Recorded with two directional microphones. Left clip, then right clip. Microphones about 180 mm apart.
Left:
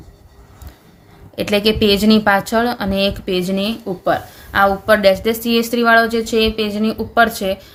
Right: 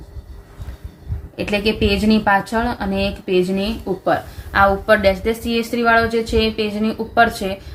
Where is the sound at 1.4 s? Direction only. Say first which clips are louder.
Left 4 dB; 50° left (ahead or behind).